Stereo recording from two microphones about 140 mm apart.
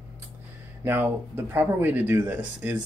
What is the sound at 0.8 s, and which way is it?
Speech, 15° right (ahead or behind).